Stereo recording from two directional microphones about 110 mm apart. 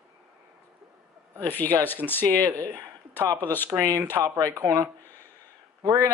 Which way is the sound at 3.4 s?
15° left (ahead or behind).